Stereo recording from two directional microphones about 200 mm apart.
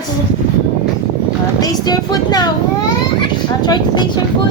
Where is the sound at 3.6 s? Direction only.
20° left (ahead or behind).